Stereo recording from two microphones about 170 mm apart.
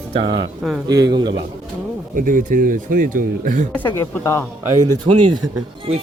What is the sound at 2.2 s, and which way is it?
Speech, 50° right (ahead or behind).